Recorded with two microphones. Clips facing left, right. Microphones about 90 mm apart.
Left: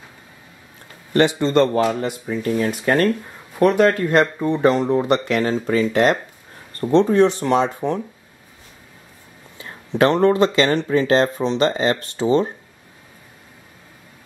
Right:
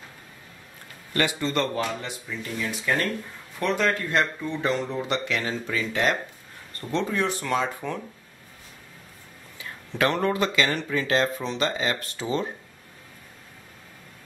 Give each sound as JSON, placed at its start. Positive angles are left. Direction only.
{"t": 1.1, "sound": "speech", "side_deg": 30}
{"t": 9.6, "sound": "speech", "side_deg": 30}